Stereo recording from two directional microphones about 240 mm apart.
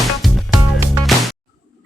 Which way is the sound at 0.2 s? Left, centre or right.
Centre.